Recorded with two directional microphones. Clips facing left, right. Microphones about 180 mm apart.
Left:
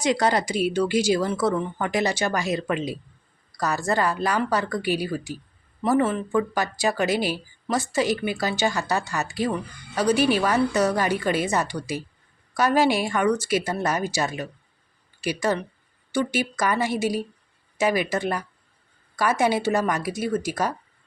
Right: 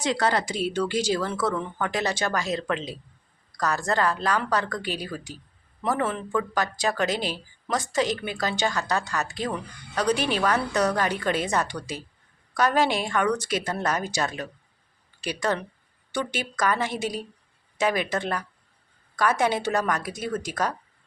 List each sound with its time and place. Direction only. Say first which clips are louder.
0.0 s speech: left 3 dB; 15° left (ahead or behind)